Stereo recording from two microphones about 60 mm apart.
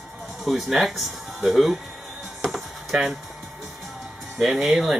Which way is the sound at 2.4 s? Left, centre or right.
Centre.